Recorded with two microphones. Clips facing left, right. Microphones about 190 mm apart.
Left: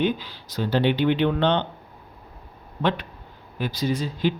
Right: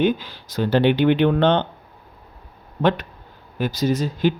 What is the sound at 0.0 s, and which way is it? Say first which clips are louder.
Speech: right 4 dB; 45° right (ahead or behind).